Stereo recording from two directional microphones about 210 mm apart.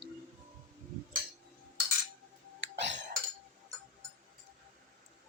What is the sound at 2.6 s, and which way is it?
Cough, 60° right (ahead or behind).